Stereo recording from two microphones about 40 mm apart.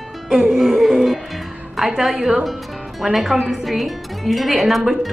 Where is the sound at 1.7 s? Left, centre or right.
Centre.